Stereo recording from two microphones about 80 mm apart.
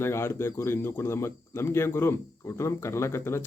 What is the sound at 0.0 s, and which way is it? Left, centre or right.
Speech, left.